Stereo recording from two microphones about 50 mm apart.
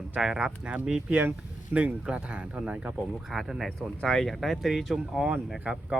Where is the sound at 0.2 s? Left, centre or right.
Centre.